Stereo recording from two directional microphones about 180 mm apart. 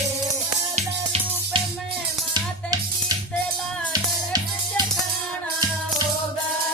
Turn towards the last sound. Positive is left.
turn(degrees=-20)  # may be behind; listen again after turning